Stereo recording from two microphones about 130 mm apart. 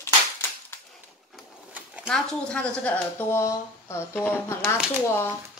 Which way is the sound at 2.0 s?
5° left (ahead or behind).